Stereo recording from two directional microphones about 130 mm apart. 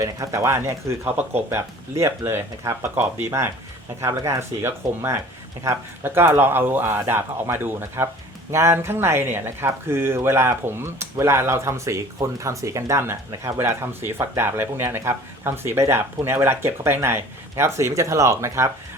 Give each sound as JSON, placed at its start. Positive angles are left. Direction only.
{"t": 0.0, "sound": "speech", "side_deg": -25}